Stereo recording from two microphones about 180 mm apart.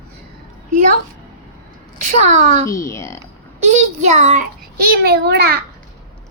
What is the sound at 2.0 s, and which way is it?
Speech, 45° right (ahead or behind).